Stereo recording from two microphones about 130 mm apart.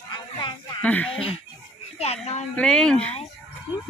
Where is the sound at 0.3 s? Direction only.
35° left (ahead or behind).